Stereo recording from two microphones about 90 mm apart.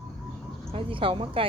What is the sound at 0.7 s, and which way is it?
Speech, 75° right (ahead or behind).